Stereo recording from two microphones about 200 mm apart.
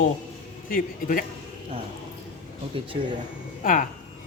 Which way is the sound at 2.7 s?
25° right (ahead or behind).